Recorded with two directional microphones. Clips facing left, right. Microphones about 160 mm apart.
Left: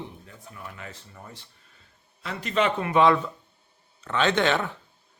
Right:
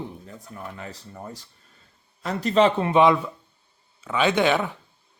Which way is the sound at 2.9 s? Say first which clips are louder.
Right 2 dB; 15° right (ahead or behind).